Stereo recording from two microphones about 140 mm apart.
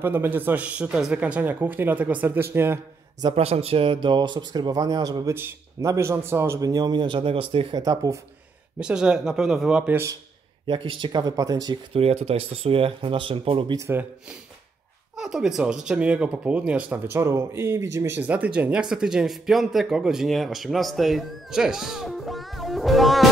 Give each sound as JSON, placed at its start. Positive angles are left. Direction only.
{"t": 0.0, "sound": "a man's voice", "side_deg": -15}
{"t": 3.3, "sound": "a man's voice", "side_deg": -45}
{"t": 7.7, "sound": "a man's voice", "side_deg": -25}
{"t": 8.7, "sound": "speech", "side_deg": -5}
{"t": 10.7, "sound": "a man's voice", "side_deg": -35}
{"t": 11.9, "sound": "a man's voice", "side_deg": -50}
{"t": 13.7, "sound": "a man's voice", "side_deg": -20}
{"t": 15.1, "sound": "speech", "side_deg": -5}